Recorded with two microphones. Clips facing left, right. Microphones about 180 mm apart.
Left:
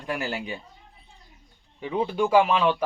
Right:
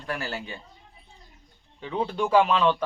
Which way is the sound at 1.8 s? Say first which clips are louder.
Left 3 dB; 10° left (ahead or behind).